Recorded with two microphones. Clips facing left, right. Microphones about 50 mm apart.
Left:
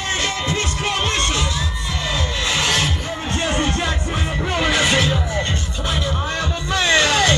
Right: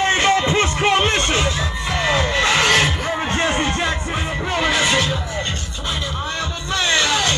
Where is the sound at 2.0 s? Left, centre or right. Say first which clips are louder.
Right 6 dB; right.